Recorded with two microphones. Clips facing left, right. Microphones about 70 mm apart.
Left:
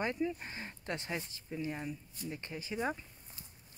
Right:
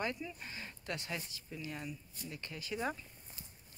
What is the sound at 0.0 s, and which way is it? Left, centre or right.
Speech, left.